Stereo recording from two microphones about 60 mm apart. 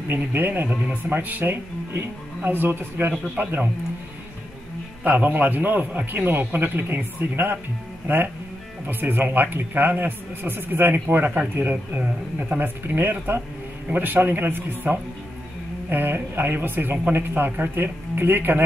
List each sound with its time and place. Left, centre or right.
0.1 s a man's voice: right
0.7 s speech: centre
1.1 s a man's voice: right
5.0 s a man's voice: right
8.8 s a man's voice: right